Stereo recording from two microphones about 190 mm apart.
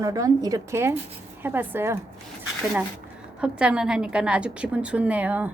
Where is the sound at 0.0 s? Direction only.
20° right (ahead or behind).